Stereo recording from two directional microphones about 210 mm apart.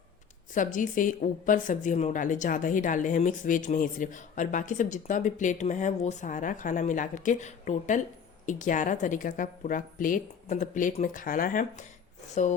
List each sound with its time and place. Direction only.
0.5 s speech: 40° left (ahead or behind)